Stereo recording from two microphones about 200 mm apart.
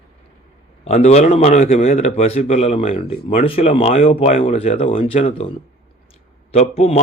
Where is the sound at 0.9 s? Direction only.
35° left (ahead or behind).